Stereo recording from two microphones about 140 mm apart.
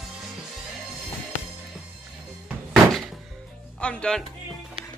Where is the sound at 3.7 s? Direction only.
5° left (ahead or behind).